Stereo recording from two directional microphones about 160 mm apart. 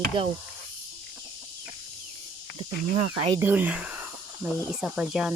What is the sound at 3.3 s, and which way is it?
Speech, 10° right (ahead or behind).